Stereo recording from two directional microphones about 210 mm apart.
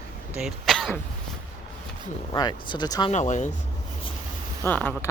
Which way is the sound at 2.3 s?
20° left (ahead or behind).